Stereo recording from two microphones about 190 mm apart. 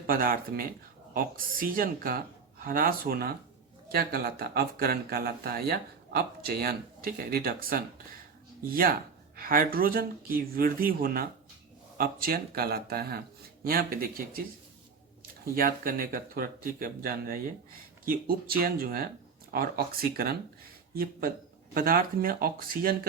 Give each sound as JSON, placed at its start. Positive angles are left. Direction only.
{"t": 0.1, "sound": "speech", "side_deg": -50}
{"t": 15.5, "sound": "speech", "side_deg": -50}